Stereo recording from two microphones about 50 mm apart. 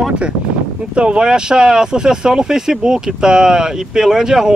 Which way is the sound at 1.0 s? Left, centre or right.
Centre.